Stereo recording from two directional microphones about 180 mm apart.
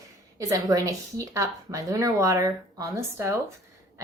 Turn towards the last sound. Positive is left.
turn(degrees=-15)  # may be behind; listen again after turning